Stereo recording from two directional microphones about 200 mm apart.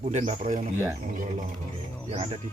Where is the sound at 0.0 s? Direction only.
35° right (ahead or behind).